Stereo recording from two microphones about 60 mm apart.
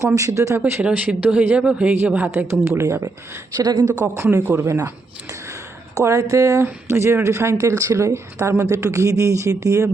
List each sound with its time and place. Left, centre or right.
0.0 s speech: right
0.8 s speech: centre
2.3 s speech: right
3.5 s a woman's voice: right
4.0 s speech: right
5.9 s speech: right
6.9 s speech: right